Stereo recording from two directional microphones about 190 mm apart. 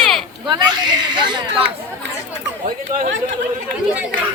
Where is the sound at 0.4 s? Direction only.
25° right (ahead or behind).